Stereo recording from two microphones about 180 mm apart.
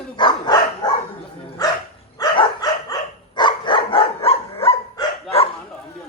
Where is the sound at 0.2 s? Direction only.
25° left (ahead or behind).